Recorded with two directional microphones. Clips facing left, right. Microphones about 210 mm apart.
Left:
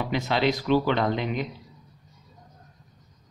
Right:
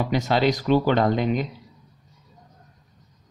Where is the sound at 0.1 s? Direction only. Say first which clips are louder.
Right 2 dB; 45° right (ahead or behind).